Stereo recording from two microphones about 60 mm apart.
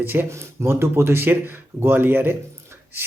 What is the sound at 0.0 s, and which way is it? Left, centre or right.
Speech, right.